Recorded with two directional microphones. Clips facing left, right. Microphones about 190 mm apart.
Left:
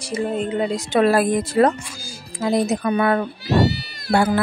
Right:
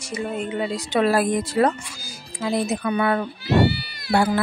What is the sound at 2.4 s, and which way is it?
A woman's voice, 40° left (ahead or behind).